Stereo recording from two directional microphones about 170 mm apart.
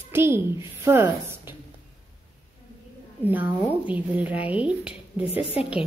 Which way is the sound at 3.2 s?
10° right (ahead or behind).